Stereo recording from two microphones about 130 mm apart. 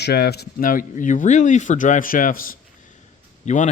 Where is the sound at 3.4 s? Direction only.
65° left (ahead or behind).